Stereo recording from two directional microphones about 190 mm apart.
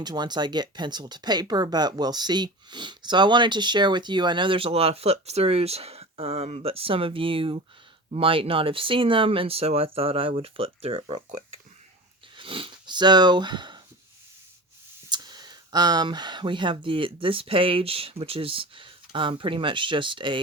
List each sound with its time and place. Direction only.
0.0 s speech: 20° right (ahead or behind)
12.4 s sniff: 25° right (ahead or behind)
15.1 s speech: 20° right (ahead or behind)